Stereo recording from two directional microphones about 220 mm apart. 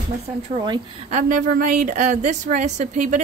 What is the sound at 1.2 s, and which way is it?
A woman's voice, 40° right (ahead or behind).